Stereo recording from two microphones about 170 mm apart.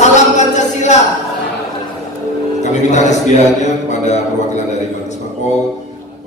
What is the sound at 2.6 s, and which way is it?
Music, 45° left (ahead or behind).